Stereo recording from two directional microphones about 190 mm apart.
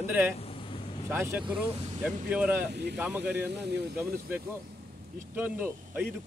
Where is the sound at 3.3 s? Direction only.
60° right (ahead or behind).